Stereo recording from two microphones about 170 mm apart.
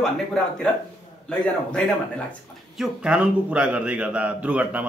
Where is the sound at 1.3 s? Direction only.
5° left (ahead or behind).